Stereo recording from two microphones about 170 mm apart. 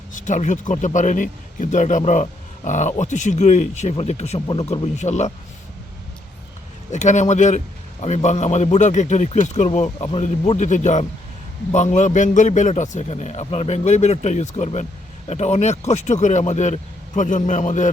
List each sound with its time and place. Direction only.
0.1 s a man's voice: 50° left (ahead or behind)
6.9 s a man's voice: 45° left (ahead or behind)